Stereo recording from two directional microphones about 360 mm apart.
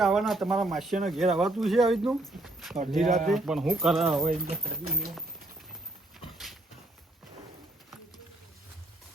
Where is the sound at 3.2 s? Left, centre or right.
Centre.